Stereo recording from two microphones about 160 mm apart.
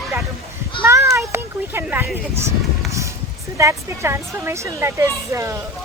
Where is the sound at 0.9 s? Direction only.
15° right (ahead or behind).